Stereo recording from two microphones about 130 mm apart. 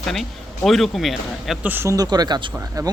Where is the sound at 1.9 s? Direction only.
30° right (ahead or behind).